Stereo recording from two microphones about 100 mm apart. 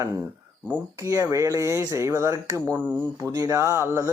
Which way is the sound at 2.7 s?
15° right (ahead or behind).